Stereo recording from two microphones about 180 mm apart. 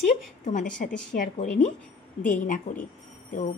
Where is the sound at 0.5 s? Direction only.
45° left (ahead or behind).